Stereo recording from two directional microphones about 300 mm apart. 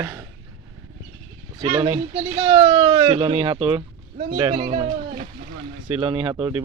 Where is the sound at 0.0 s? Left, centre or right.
Centre.